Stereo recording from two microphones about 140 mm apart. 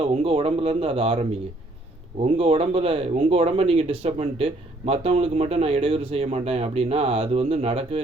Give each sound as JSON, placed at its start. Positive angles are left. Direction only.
{"t": 0.0, "sound": "speech", "side_deg": -45}